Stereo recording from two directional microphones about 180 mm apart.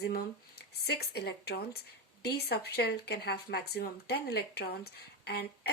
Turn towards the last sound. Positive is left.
turn(degrees=65)  # may be behind; listen again after turning